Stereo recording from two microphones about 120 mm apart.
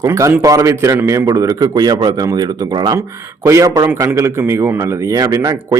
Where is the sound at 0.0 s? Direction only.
25° right (ahead or behind).